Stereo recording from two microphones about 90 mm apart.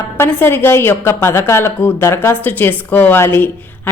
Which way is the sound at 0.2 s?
25° left (ahead or behind).